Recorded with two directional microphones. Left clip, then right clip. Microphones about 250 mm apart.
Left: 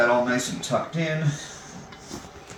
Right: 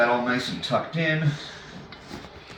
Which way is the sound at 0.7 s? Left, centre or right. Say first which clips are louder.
Even; centre.